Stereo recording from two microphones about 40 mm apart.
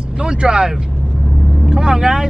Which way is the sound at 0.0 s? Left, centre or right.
Right.